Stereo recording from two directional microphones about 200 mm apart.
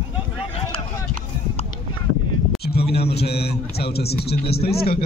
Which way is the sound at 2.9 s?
55° left (ahead or behind).